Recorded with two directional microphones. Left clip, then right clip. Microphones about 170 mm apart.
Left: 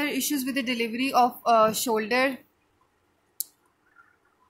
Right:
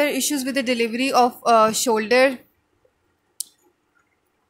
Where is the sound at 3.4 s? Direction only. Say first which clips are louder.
Right 5 dB; 25° right (ahead or behind).